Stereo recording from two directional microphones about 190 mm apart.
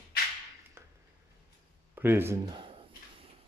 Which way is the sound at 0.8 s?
10° right (ahead or behind).